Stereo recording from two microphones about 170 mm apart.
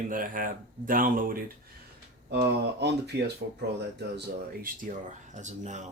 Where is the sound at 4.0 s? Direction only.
70° right (ahead or behind); by 5.8 s 45° right (ahead or behind).